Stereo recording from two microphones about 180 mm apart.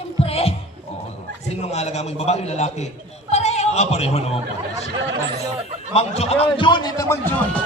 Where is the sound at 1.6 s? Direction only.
40° left (ahead or behind).